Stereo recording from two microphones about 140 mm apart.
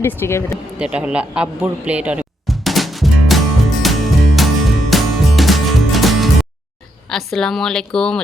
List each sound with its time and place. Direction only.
0.0 s speech: 15° left (ahead or behind)
0.8 s music: 10° right (ahead or behind)
7.1 s a woman's voice: centre (ahead or behind)